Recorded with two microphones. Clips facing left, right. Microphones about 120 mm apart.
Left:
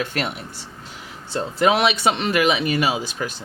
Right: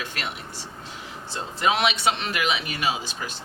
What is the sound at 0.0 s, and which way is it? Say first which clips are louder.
Speech: left 9 dB; 50° left (ahead or behind).